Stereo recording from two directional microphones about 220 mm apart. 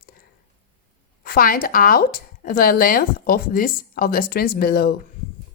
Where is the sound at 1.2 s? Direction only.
40° left (ahead or behind).